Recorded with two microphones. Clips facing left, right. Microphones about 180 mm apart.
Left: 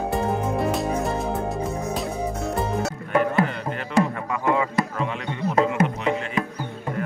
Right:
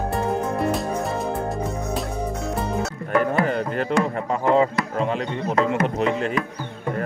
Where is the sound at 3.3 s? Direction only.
40° right (ahead or behind).